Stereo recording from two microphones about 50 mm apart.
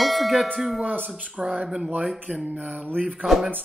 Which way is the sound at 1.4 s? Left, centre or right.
Centre.